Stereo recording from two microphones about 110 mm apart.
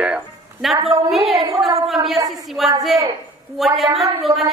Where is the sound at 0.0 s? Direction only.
5° right (ahead or behind).